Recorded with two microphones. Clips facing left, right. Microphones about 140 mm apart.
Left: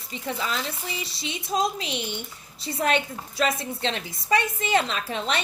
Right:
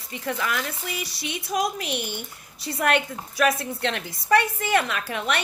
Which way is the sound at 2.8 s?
60° right (ahead or behind).